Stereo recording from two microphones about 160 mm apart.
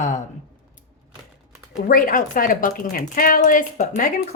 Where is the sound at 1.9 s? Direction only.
60° left (ahead or behind).